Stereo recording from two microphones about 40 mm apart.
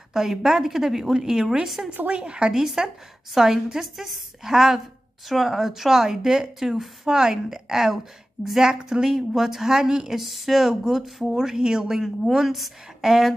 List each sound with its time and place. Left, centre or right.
0.1 s speech: centre
11.0 s a woman's voice: centre
11.4 s speech: centre
12.0 s a woman's voice: centre